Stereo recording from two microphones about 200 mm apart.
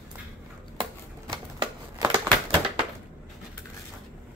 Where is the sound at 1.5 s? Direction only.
25° right (ahead or behind).